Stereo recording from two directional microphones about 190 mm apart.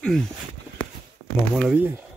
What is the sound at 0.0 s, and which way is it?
Speech, centre (ahead or behind).